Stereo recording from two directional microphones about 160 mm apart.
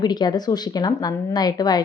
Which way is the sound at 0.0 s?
25° left (ahead or behind).